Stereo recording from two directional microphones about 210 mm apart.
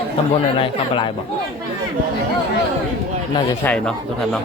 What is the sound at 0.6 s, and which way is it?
Speech, 25° left (ahead or behind).